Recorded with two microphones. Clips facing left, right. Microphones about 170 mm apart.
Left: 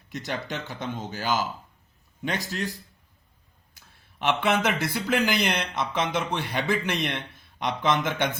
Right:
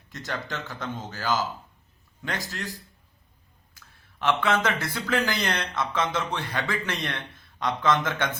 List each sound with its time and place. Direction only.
0.1 s speech: 15° left (ahead or behind)
4.2 s speech: 15° left (ahead or behind)